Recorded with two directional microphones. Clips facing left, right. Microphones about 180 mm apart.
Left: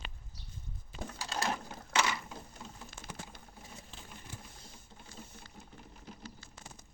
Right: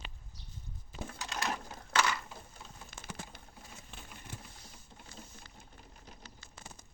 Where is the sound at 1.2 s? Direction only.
30° left (ahead or behind).